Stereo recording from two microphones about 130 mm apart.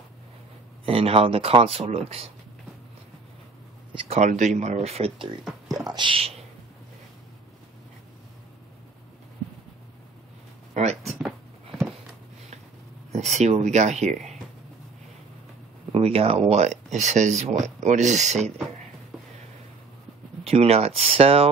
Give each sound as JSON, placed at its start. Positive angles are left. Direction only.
{"t": 0.8, "sound": "speech", "side_deg": -45}
{"t": 4.2, "sound": "speech", "side_deg": -70}
{"t": 5.4, "sound": "beatboxing", "side_deg": 0}
{"t": 5.9, "sound": "speech", "side_deg": -40}
{"t": 10.7, "sound": "a sound", "side_deg": -60}
{"t": 11.0, "sound": "a sound", "side_deg": 0}
{"t": 13.1, "sound": "speech", "side_deg": -60}
{"t": 15.9, "sound": "speech", "side_deg": -50}
{"t": 20.4, "sound": "speech", "side_deg": -50}